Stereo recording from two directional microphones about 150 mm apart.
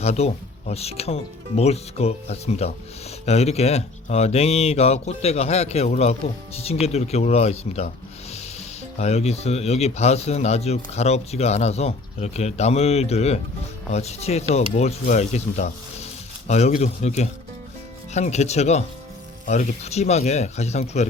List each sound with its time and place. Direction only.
0.0 s speech: 45° left (ahead or behind)